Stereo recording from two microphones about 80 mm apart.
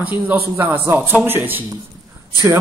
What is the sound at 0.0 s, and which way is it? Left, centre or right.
A man's voice, right.